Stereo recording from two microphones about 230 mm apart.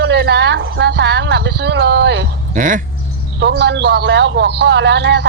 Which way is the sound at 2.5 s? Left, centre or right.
Right.